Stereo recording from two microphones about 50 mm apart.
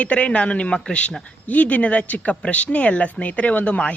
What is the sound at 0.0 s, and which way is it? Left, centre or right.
Speech, left.